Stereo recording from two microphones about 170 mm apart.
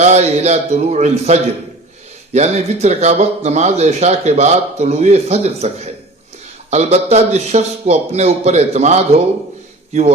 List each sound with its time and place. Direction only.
0.0 s speech: 40° right (ahead or behind)